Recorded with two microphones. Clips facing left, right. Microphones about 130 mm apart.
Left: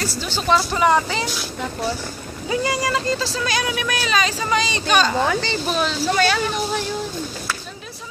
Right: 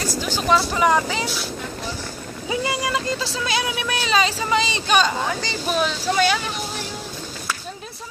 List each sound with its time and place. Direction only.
0.0 s speech: 15° right (ahead or behind)
0.5 s speech: centre (ahead or behind)
2.5 s speech: 15° right (ahead or behind)